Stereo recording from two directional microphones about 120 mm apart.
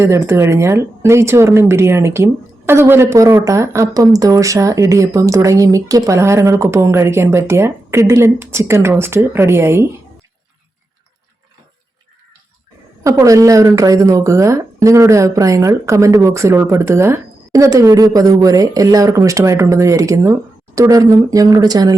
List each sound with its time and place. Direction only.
0.0 s speech: 20° right (ahead or behind)
13.0 s speech: 25° right (ahead or behind)